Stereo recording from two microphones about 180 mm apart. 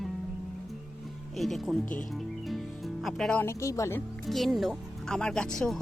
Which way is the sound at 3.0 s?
Centre (ahead or behind).